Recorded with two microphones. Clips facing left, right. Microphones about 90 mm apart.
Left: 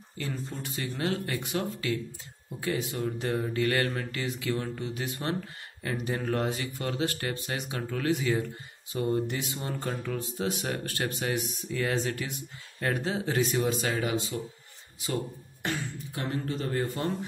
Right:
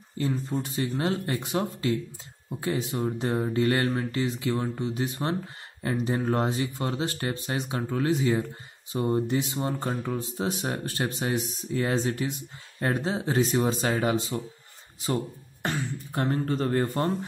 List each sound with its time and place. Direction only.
0.2 s speech: 25° right (ahead or behind)
16.1 s speech: 45° right (ahead or behind)